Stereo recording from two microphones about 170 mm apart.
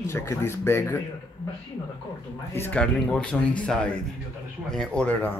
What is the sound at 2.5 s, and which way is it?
Speech, 10° left (ahead or behind).